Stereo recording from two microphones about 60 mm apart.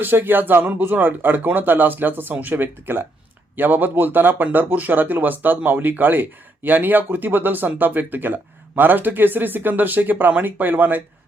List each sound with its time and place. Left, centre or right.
0.0 s speech: right